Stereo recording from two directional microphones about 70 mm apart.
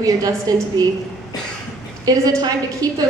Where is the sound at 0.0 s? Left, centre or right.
Right.